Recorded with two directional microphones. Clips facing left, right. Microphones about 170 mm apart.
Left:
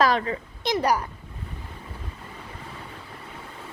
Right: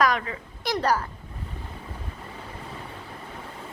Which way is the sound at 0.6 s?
15° left (ahead or behind).